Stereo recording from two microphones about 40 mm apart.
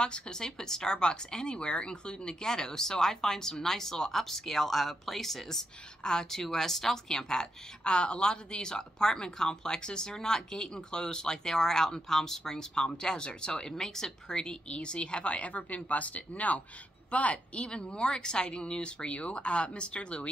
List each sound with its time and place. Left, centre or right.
0.0 s a woman's voice: centre